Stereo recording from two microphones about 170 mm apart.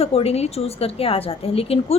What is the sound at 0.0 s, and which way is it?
A woman's voice, 35° left (ahead or behind).